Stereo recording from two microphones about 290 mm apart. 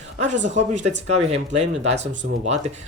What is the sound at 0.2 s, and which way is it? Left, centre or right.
Speech, right.